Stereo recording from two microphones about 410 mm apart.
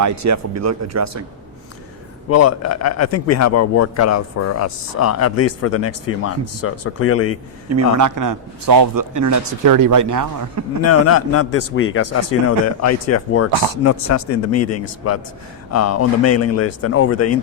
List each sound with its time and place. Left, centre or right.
0.0 s speech: right
2.3 s speech: left
7.7 s a man's voice: right
10.8 s speech: left